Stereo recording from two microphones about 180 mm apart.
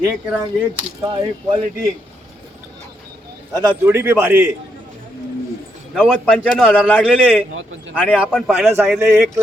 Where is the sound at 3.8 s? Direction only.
10° right (ahead or behind).